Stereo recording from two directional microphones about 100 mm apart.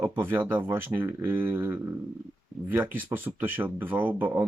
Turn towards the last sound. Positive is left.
turn(degrees=-20)  # may be behind; listen again after turning